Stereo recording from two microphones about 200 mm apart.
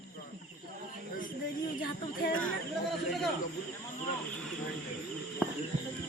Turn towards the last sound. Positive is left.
turn(degrees=5)  # may be behind; listen again after turning